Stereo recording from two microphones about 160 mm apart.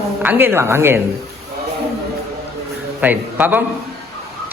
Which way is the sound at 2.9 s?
10° right (ahead or behind).